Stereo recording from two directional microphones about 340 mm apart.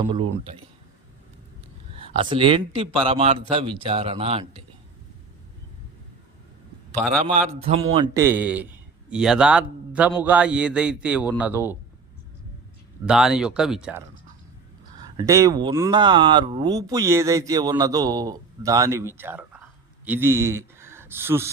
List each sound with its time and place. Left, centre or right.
0.1 s speech: centre
2.0 s speech: centre
7.6 s a man's voice: centre
13.1 s a man's voice: centre
15.2 s speech: centre